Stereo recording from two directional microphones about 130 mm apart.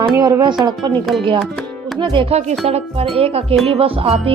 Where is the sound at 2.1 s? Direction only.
40° right (ahead or behind).